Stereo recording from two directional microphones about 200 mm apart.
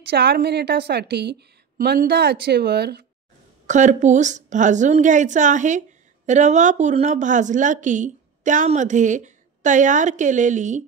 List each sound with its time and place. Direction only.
0.1 s a woman's voice: 55° right (ahead or behind)
3.6 s a woman's voice: 35° right (ahead or behind)